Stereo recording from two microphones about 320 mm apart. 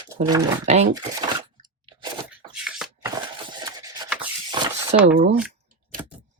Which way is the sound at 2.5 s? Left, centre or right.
Centre.